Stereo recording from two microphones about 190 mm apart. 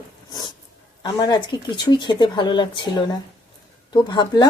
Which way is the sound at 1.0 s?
25° left (ahead or behind).